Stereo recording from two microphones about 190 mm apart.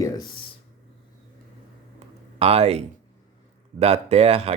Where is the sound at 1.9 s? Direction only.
30° right (ahead or behind).